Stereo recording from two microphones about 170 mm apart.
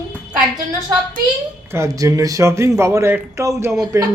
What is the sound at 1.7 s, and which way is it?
Speech, 20° right (ahead or behind).